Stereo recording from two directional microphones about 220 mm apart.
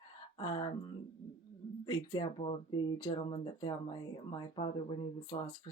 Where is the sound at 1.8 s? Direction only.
20° left (ahead or behind).